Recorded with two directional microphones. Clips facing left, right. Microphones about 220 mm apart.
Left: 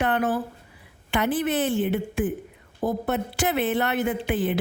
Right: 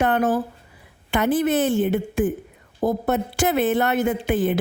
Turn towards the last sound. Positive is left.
turn(degrees=-45)  # may be behind; listen again after turning